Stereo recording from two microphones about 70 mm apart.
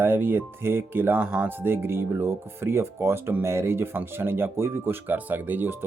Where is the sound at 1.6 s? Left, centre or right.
Right.